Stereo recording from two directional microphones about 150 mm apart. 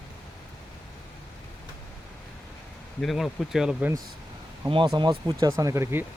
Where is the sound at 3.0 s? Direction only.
Centre (ahead or behind).